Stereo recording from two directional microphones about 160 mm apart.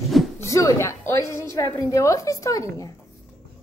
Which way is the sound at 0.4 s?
20° left (ahead or behind).